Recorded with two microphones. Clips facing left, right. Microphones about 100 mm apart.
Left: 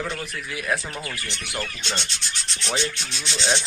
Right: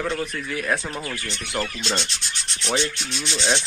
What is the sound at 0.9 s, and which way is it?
Speech, 30° right (ahead or behind).